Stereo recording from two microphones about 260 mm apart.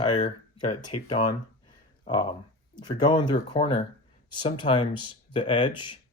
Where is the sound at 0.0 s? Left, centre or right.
Centre.